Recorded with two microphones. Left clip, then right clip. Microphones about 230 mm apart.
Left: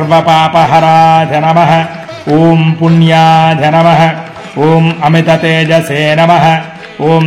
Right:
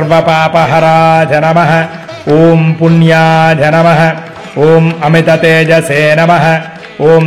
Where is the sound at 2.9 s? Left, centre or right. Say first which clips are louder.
Left 2 dB; centre.